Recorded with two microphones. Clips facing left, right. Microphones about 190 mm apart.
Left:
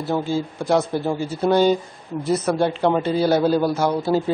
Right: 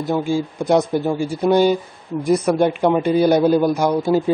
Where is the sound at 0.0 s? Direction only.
15° right (ahead or behind).